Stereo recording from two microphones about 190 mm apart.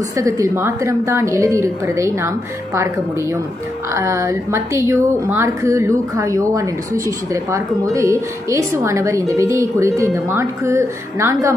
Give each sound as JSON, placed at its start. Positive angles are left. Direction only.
{"t": 0.2, "sound": "a woman's voice", "side_deg": -15}